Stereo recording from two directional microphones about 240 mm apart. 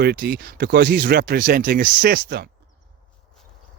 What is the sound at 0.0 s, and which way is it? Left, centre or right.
Speech, right.